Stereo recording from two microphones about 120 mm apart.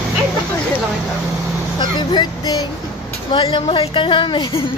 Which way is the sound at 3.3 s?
45° left (ahead or behind).